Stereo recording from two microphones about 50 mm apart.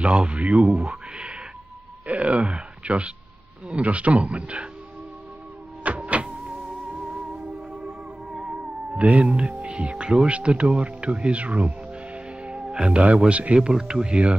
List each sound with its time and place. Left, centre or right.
0.0 s speech: right
0.8 s a sound: right
3.6 s speech: right
5.9 s music: right
8.9 s speech: right
10.8 s music: right
13.3 s speech: right
13.6 s speech: centre